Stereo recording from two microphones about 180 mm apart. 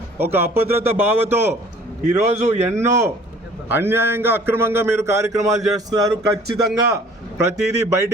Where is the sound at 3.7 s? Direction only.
15° right (ahead or behind).